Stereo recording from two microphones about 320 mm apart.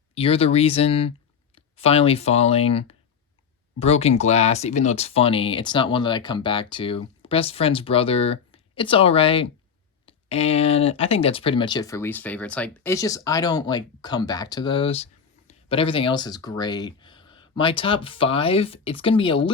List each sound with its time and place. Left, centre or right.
0.1 s speech: centre